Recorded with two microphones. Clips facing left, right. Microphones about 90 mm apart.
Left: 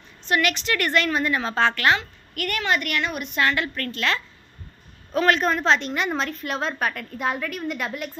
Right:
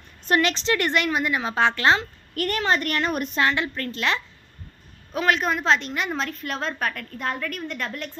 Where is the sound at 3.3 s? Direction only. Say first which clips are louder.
Left 3 dB; 20° right (ahead or behind).